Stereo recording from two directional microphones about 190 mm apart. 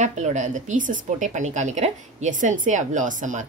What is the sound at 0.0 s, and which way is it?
Speech, 40° right (ahead or behind).